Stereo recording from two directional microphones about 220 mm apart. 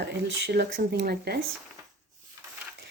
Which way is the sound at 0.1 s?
50° right (ahead or behind).